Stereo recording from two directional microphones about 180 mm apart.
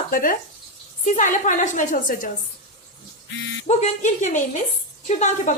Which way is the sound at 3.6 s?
40° left (ahead or behind).